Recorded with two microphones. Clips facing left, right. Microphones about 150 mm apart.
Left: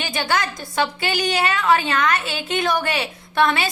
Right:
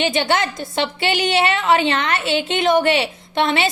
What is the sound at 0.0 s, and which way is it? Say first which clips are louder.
A woman's voice: right 4 dB; 25° right (ahead or behind).